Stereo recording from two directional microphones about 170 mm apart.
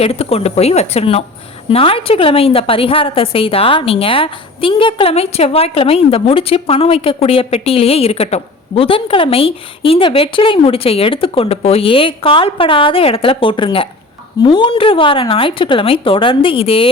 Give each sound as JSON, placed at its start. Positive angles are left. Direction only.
{"t": 0.0, "sound": "a woman's voice", "side_deg": 35}